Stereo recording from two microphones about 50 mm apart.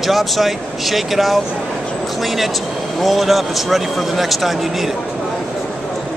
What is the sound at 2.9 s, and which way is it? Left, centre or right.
Speech, centre.